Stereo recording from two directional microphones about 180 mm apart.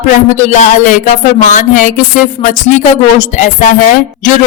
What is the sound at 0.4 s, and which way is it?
A woman's voice, 45° left (ahead or behind).